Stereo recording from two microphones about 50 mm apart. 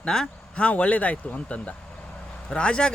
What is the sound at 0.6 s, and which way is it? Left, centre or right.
Speech, left.